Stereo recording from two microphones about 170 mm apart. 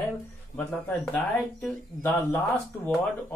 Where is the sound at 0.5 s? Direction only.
10° left (ahead or behind).